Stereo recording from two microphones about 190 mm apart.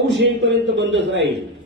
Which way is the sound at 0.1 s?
75° right (ahead or behind).